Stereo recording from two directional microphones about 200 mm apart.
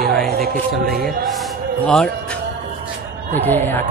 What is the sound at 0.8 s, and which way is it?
Music, 50° right (ahead or behind).